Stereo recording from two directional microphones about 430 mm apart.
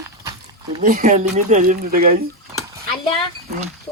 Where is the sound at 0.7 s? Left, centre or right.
Centre.